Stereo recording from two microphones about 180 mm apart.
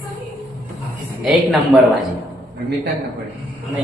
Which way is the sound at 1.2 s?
5° right (ahead or behind).